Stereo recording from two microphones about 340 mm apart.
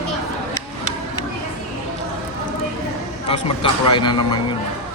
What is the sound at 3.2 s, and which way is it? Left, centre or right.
Speech, centre.